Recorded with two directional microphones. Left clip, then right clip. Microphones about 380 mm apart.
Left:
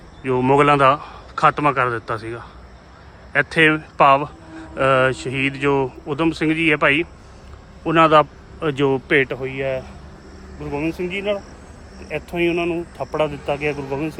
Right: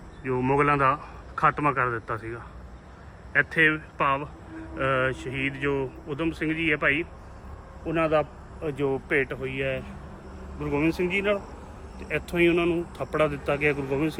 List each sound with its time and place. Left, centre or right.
0.3 s a man's voice: centre
9.4 s speech: centre